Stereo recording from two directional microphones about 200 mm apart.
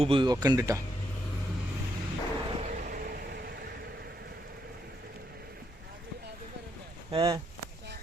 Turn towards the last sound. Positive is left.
turn(degrees=-20)  # may be behind; listen again after turning